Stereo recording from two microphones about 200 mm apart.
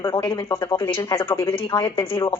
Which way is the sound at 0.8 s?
25° left (ahead or behind).